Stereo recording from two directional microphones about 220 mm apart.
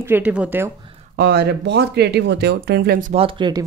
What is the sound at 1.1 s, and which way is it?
Speech, 45° right (ahead or behind).